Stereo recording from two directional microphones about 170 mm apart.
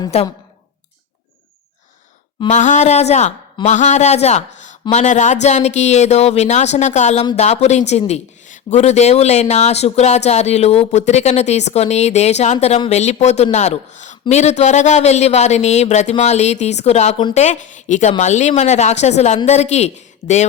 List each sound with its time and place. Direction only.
0.1 s a woman's voice: 35° left (ahead or behind)
2.5 s a woman's voice: 45° left (ahead or behind)